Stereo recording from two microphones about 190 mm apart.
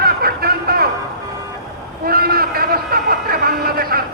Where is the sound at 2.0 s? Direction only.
50° right (ahead or behind).